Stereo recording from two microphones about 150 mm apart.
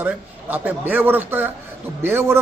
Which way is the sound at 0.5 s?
10° right (ahead or behind).